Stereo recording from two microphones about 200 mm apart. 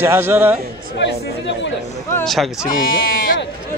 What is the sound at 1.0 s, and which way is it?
Speech, 60° left (ahead or behind).